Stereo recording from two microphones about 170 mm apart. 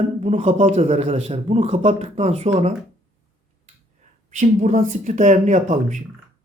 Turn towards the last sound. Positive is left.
turn(degrees=-45)  # may be behind; listen again after turning